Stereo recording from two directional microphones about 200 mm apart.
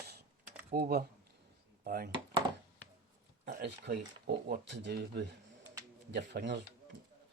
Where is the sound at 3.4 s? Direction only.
50° right (ahead or behind).